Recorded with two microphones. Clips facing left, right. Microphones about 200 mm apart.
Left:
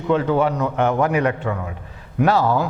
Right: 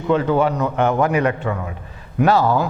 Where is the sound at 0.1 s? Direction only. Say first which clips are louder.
Right 1 dB; 20° right (ahead or behind).